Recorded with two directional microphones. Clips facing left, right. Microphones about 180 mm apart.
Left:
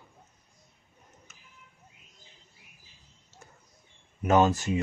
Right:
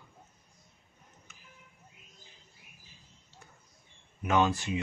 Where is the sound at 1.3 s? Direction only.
40° left (ahead or behind).